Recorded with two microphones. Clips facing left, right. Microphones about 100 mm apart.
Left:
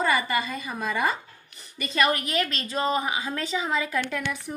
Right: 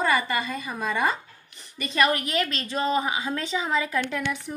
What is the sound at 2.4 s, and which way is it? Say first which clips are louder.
A woman's voice: even; 20° right (ahead or behind).